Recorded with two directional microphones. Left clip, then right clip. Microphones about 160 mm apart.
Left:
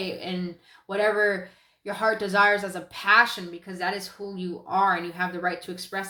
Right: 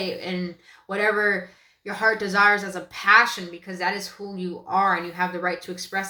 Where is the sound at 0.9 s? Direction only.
25° left (ahead or behind).